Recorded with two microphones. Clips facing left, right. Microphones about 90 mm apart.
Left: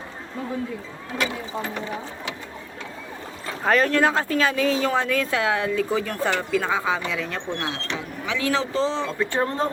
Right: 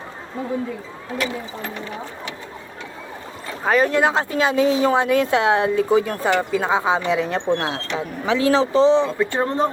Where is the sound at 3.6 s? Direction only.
10° right (ahead or behind).